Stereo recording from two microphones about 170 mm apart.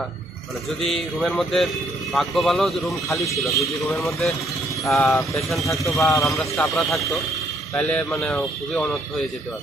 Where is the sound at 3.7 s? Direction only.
15° left (ahead or behind).